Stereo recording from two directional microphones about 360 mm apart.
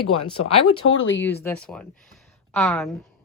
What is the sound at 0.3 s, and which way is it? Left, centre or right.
Speech, centre.